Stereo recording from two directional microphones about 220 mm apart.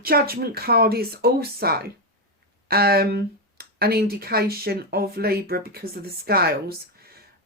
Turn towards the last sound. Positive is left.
turn(degrees=-45)  # may be behind; listen again after turning